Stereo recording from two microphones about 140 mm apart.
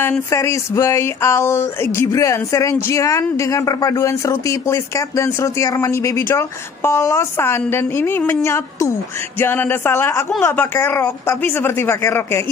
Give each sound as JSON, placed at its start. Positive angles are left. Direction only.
{"t": 0.3, "sound": "speech", "side_deg": 20}